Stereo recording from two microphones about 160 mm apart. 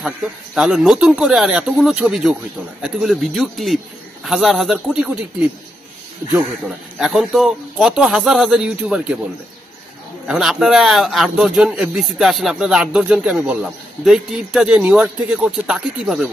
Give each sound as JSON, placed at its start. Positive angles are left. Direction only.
{"t": 0.6, "sound": "a man's voice", "side_deg": 0}
{"t": 7.0, "sound": "a man's voice", "side_deg": 0}
{"t": 10.2, "sound": "a man's voice", "side_deg": -5}